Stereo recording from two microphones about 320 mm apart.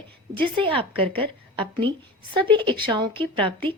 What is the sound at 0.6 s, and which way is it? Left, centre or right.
Speech, centre.